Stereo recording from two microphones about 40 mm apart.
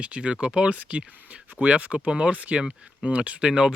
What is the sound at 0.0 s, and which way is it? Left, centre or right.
Speech, right.